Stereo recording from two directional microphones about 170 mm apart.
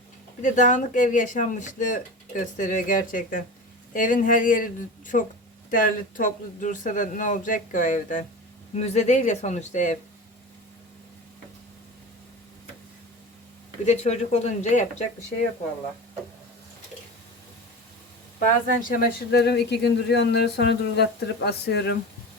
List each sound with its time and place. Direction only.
0.4 s speech: 45° left (ahead or behind)
13.8 s speech: 40° left (ahead or behind)
18.4 s speech: 55° left (ahead or behind); by 21.9 s 80° left